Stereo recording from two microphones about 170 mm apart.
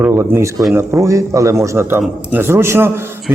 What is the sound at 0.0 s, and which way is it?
A man's voice, 15° right (ahead or behind).